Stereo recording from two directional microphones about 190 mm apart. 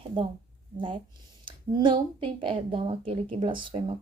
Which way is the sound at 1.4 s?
25° right (ahead or behind).